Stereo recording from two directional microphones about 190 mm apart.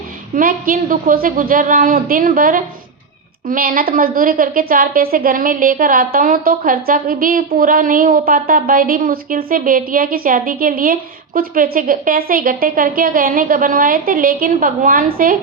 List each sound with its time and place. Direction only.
0.3 s a woman's voice: 50° right (ahead or behind)